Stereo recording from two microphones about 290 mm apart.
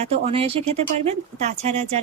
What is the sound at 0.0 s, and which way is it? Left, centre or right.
Speech, centre.